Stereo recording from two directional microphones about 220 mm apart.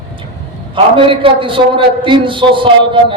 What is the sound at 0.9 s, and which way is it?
A man's voice, 25° right (ahead or behind).